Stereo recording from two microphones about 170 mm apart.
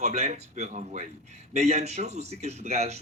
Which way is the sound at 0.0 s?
40° right (ahead or behind).